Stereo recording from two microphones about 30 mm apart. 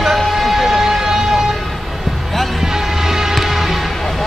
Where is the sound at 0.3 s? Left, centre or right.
Centre.